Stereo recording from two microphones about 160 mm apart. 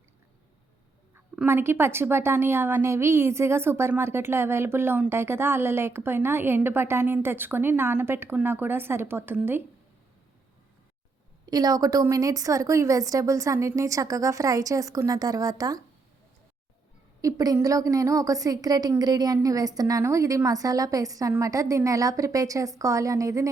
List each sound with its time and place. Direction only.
1.1 s speech: 15° right (ahead or behind)
11.4 s a woman's voice: 25° right (ahead or behind)
17.2 s a woman's voice: 20° right (ahead or behind)